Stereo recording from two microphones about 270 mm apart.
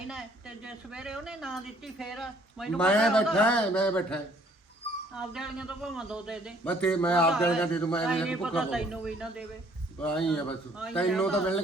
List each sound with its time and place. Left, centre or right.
0.1 s speech: centre